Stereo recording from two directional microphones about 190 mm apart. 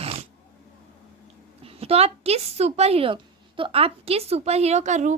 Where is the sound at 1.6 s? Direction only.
30° right (ahead or behind).